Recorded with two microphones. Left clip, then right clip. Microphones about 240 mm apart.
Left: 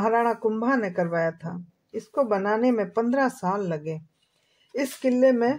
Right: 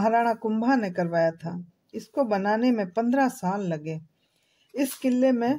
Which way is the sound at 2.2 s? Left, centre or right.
Centre.